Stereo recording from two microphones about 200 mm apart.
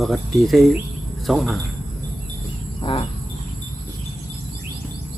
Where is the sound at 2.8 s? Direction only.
25° left (ahead or behind).